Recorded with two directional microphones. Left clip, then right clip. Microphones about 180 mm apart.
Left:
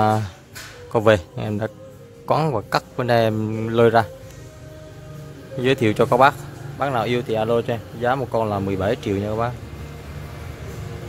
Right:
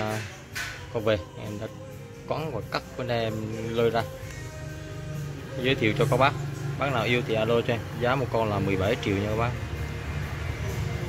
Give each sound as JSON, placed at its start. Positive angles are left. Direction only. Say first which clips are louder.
{"t": 0.9, "sound": "a man's voice", "louder": "left 10 dB", "side_deg": 45}
{"t": 5.6, "sound": "speech", "louder": "left 6 dB", "side_deg": 35}